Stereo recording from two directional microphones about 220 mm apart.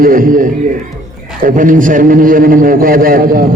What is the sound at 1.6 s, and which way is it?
A man's voice, 35° right (ahead or behind).